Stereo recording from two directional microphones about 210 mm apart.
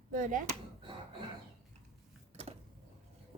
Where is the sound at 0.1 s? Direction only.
40° right (ahead or behind).